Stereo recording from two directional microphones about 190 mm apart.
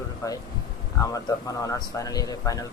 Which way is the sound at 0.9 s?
20° left (ahead or behind).